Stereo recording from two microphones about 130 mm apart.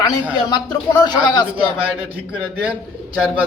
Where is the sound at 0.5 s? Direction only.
35° left (ahead or behind).